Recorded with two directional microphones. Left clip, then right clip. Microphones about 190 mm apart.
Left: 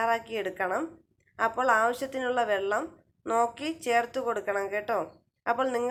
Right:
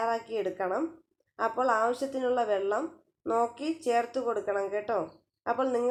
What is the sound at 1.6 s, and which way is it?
A woman's voice, 15° left (ahead or behind).